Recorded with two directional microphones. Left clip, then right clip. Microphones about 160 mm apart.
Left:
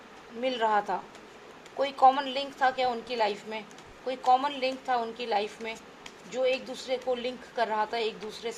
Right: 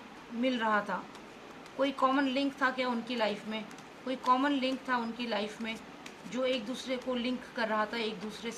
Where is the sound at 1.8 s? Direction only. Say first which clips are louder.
Left 6 dB; 50° left (ahead or behind).